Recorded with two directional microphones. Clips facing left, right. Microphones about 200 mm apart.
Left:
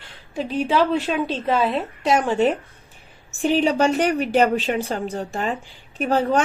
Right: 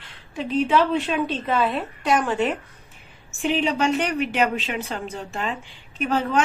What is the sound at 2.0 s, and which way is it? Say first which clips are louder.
A woman's voice: left 3 dB; 25° left (ahead or behind).